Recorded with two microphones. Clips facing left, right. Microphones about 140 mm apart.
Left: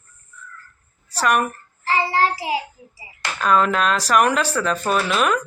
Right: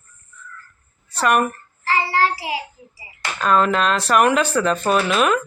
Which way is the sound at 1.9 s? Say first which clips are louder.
Even; 20° left (ahead or behind).